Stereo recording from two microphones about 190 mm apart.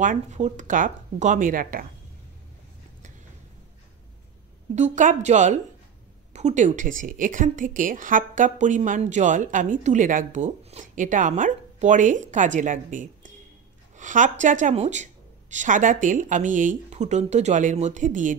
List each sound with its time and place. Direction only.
0.0 s speech: 40° right (ahead or behind)
4.7 s a woman's voice: 40° right (ahead or behind)